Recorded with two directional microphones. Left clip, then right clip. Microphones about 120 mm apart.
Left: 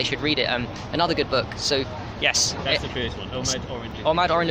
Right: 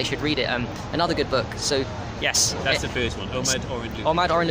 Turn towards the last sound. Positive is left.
turn(degrees=-10)  # may be behind; listen again after turning